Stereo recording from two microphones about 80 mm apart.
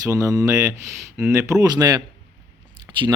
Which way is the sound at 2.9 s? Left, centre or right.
Right.